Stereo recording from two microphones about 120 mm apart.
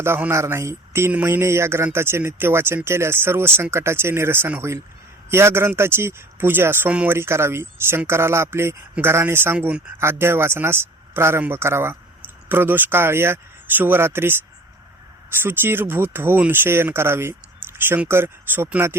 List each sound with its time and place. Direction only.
0.0 s speech: 20° right (ahead or behind)
10.0 s speech: 20° right (ahead or behind)
15.4 s speech: 20° right (ahead or behind)